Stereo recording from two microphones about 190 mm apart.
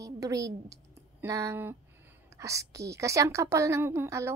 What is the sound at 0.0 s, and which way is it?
A woman's voice, 15° right (ahead or behind).